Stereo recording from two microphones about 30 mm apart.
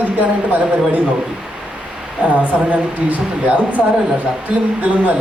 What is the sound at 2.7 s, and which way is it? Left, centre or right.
A man's voice, right.